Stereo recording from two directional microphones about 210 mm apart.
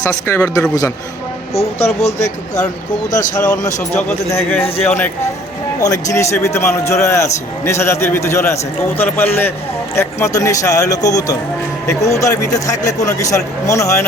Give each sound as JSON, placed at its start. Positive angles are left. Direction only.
{"t": 0.0, "sound": "a man's voice", "side_deg": 15}
{"t": 1.5, "sound": "speech", "side_deg": 30}
{"t": 3.9, "sound": "a man's voice", "side_deg": 10}
{"t": 5.8, "sound": "a man's voice", "side_deg": 15}